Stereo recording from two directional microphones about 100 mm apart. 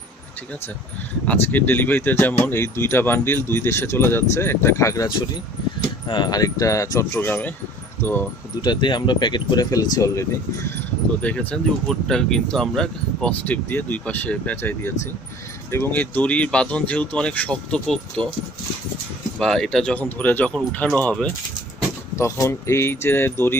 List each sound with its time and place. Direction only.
1.3 s speech: 20° left (ahead or behind)
6.1 s speech: 45° left (ahead or behind)
7.1 s speech: 20° left (ahead or behind)
8.6 s speech: 50° left (ahead or behind)
11.2 s speech: 10° left (ahead or behind)
13.7 s speech: 20° left (ahead or behind)
19.4 s speech: 5° left (ahead or behind)
22.1 s speech: 30° left (ahead or behind)